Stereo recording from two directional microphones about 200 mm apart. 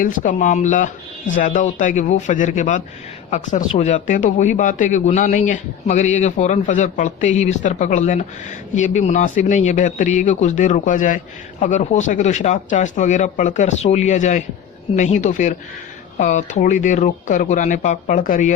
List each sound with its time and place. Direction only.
0.0 s speech: 40° left (ahead or behind)